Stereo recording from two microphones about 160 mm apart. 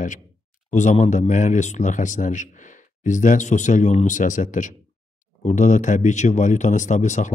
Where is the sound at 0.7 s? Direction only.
50° left (ahead or behind).